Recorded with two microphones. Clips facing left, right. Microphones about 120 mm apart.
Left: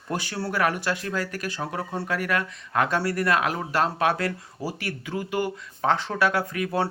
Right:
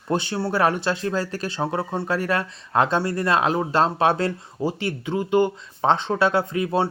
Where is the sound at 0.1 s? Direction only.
25° right (ahead or behind).